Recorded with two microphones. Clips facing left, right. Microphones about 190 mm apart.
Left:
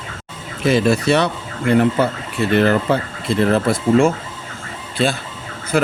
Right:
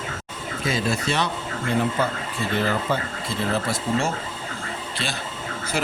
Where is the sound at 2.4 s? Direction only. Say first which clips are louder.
Left 10 dB; 70° left (ahead or behind).